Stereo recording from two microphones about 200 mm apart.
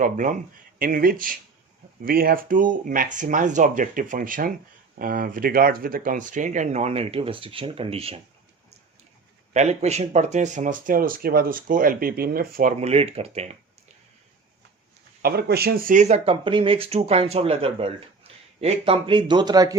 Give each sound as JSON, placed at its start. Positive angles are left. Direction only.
{"t": 0.0, "sound": "speech", "side_deg": -40}
{"t": 9.5, "sound": "speech", "side_deg": -35}
{"t": 12.7, "sound": "speech", "side_deg": -30}
{"t": 15.2, "sound": "speech", "side_deg": -50}